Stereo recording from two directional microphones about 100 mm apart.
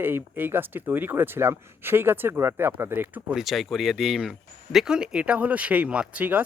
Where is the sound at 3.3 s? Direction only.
Centre (ahead or behind).